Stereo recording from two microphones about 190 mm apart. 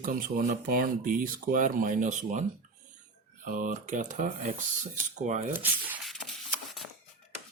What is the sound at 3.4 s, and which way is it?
Speech, 45° right (ahead or behind).